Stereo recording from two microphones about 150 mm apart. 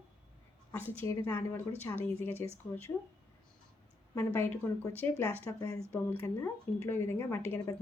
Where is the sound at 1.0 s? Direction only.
20° left (ahead or behind).